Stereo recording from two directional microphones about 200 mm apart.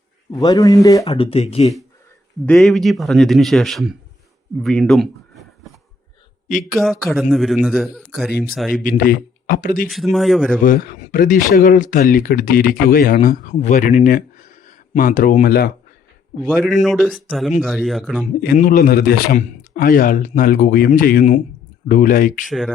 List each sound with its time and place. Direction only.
0.3 s speech: 15° left (ahead or behind)
1.0 s speech: 30° left (ahead or behind)
2.5 s speech: centre (ahead or behind)
6.5 s speech: 40° left (ahead or behind)
6.7 s speech: centre (ahead or behind)
8.8 s speech: 45° left (ahead or behind)
9.9 s speech: centre (ahead or behind)
10.6 s speech: 45° left (ahead or behind)
16.4 s speech: centre (ahead or behind)
18.3 s speech: 45° left (ahead or behind)
22.4 s speech: centre (ahead or behind)